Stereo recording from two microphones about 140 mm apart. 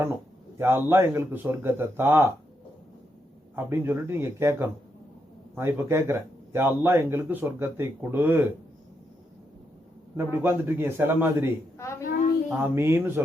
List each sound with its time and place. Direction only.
0.6 s speech: 15° right (ahead or behind)
3.5 s speech: 15° right (ahead or behind)
10.2 s speech: 15° right (ahead or behind)
11.8 s a woman's voice: 20° left (ahead or behind)
12.7 s speech: 15° right (ahead or behind)